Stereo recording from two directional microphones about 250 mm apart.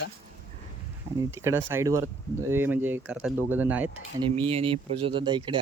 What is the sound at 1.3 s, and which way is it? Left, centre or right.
Speech, centre.